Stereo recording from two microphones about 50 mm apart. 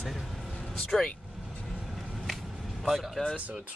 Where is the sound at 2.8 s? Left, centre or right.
Centre.